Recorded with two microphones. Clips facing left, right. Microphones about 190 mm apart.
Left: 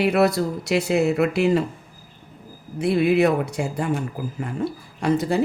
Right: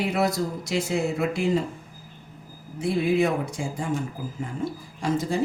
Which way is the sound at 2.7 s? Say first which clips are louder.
Left 4 dB; 65° left (ahead or behind).